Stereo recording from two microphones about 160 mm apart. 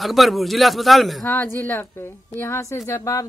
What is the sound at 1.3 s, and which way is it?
A woman's voice, 15° left (ahead or behind).